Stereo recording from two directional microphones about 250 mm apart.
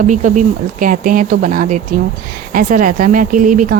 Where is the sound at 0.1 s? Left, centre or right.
Right.